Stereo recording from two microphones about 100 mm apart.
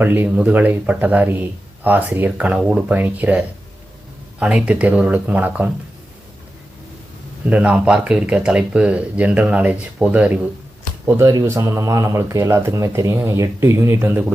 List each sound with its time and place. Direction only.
0.0 s speech: 20° right (ahead or behind)
7.5 s speech: 10° right (ahead or behind)
11.0 s speech: 30° right (ahead or behind)